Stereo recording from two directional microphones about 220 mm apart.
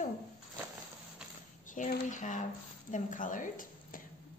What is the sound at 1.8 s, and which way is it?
A woman's voice, 35° left (ahead or behind).